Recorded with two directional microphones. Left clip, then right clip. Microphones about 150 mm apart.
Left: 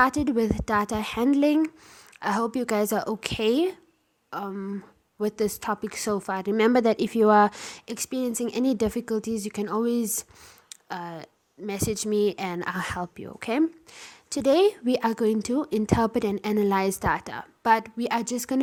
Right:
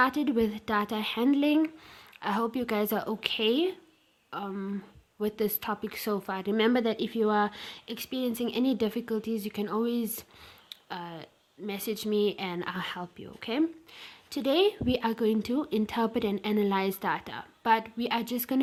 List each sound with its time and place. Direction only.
0.0 s speech: 40° left (ahead or behind)
4.5 s speech: 25° left (ahead or behind)
5.2 s speech: 35° left (ahead or behind)